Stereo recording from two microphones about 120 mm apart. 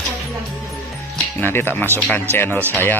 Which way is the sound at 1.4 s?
20° left (ahead or behind).